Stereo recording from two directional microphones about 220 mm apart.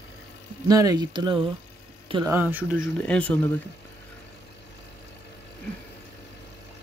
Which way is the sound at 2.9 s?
5° left (ahead or behind).